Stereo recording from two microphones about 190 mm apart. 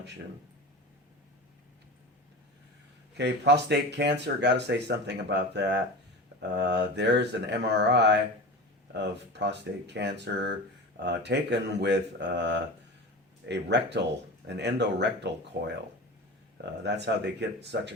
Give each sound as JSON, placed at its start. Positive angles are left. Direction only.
{"t": 3.2, "sound": "speech", "side_deg": -65}
{"t": 16.9, "sound": "speech", "side_deg": -65}